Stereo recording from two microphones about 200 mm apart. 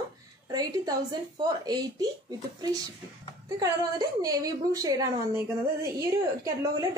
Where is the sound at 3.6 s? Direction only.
20° right (ahead or behind).